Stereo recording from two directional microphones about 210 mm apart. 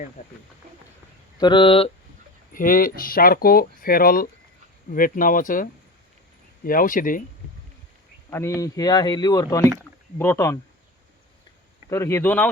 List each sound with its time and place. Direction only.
1.4 s speech: 20° left (ahead or behind)
2.5 s speech: 40° left (ahead or behind)
6.7 s speech: 40° left (ahead or behind)
8.3 s speech: 15° left (ahead or behind)
11.9 s speech: 15° left (ahead or behind)